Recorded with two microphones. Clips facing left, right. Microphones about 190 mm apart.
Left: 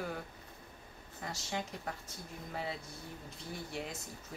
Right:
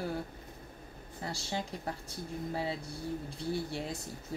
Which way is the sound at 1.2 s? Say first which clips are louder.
Right 3 dB; 30° right (ahead or behind).